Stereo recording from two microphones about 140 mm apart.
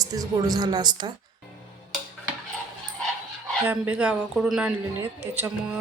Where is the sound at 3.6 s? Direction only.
10° right (ahead or behind).